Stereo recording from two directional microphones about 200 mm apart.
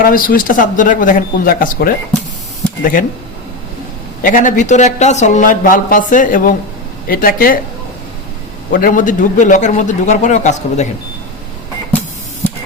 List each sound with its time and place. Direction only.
0.0 s speech: 45° left (ahead or behind)
4.2 s speech: 40° left (ahead or behind)
8.7 s speech: 45° left (ahead or behind)